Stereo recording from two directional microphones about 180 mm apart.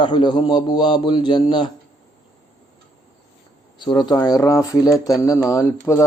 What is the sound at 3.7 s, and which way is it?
Speech, 25° left (ahead or behind).